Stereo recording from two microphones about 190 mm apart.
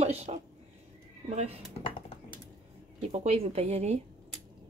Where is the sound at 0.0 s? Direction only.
35° right (ahead or behind).